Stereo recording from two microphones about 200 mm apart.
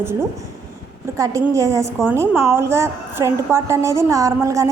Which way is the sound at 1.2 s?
15° right (ahead or behind).